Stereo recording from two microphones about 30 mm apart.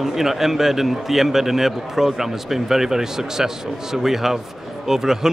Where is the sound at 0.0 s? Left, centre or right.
Centre.